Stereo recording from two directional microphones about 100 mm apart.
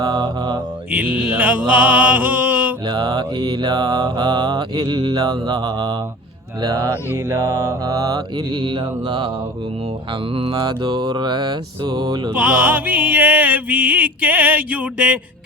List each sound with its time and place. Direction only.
0.0 s mantra: 40° right (ahead or behind)
0.9 s music: 15° right (ahead or behind)
2.8 s mantra: 45° right (ahead or behind); by 5.1 s 65° right (ahead or behind)
5.1 s mantra: 40° right (ahead or behind)
6.6 s music: 40° right (ahead or behind)
8.6 s mantra: 50° right (ahead or behind)
10.5 s mantra: 45° right (ahead or behind)
12.3 s music: 10° right (ahead or behind)